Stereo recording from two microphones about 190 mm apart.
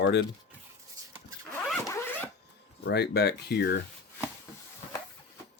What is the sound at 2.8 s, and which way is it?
Speech, 60° left (ahead or behind).